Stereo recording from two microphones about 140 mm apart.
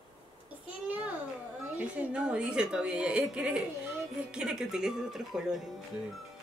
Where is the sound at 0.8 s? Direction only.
10° right (ahead or behind).